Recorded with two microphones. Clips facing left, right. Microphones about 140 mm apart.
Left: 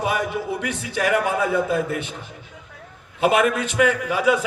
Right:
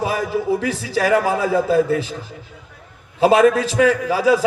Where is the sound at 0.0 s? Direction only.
30° right (ahead or behind).